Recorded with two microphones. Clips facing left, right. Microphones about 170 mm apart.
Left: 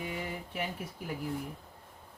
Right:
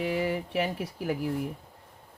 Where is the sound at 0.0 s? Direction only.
90° right.